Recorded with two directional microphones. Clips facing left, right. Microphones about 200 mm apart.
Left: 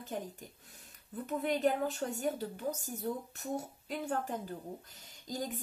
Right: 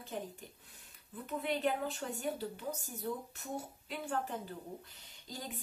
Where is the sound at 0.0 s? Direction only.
45° left (ahead or behind).